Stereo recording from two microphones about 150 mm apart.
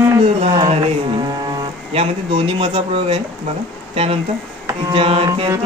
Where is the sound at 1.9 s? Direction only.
40° right (ahead or behind).